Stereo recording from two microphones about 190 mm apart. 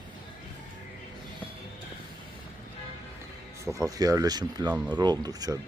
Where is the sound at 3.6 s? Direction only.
15° right (ahead or behind).